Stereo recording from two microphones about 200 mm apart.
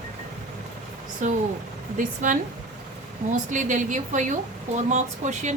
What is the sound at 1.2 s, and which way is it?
Speech, 40° right (ahead or behind).